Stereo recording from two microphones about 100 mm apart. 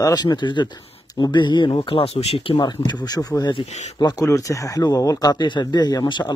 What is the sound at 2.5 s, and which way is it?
Speech, 45° left (ahead or behind).